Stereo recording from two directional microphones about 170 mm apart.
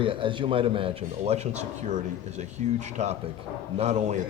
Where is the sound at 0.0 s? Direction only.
30° right (ahead or behind).